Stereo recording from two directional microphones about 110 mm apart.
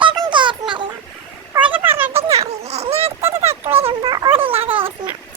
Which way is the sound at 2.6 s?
75° right (ahead or behind).